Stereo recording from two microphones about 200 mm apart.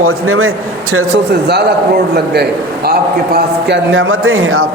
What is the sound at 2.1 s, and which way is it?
A man's voice, 50° right (ahead or behind).